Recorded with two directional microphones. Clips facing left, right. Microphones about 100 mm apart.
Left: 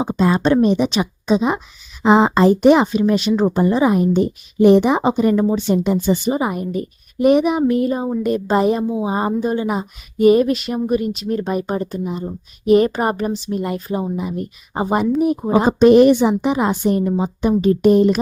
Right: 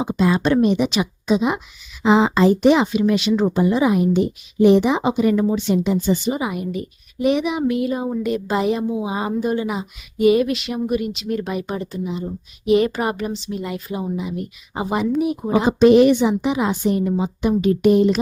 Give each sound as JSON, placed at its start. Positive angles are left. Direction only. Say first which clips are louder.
{"t": 0.0, "sound": "a woman's voice", "louder": "left 2 dB", "side_deg": 35}